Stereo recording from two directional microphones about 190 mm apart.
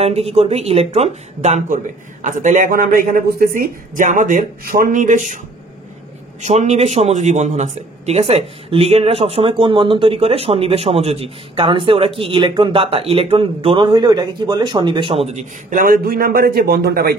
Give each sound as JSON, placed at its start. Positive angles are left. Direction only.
{"t": 0.0, "sound": "speech", "side_deg": -30}
{"t": 6.4, "sound": "speech", "side_deg": -35}
{"t": 15.7, "sound": "speech", "side_deg": -50}